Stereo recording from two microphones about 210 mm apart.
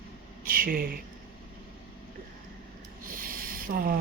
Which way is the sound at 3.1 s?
40° right (ahead or behind).